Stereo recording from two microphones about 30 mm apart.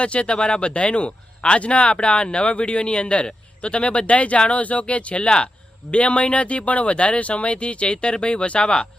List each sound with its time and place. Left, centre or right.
0.0 s speech: left
8.6 s speech: left